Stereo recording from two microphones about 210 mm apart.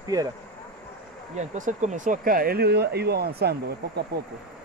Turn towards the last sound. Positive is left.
turn(degrees=-50)  # may be behind; listen again after turning